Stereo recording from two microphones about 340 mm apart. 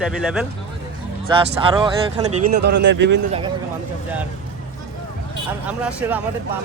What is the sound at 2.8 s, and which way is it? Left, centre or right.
Speech, right.